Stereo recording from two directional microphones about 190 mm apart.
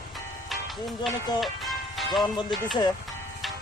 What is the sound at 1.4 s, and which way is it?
Speech, centre (ahead or behind).